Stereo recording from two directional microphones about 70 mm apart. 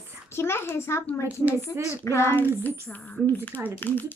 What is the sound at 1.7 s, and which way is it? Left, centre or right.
Child singing, left.